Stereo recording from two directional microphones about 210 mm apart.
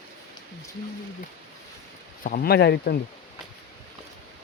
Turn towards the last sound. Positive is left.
turn(degrees=50)  # may be behind; listen again after turning